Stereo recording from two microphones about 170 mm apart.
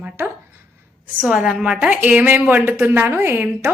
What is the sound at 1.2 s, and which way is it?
A woman's voice, 5° right (ahead or behind).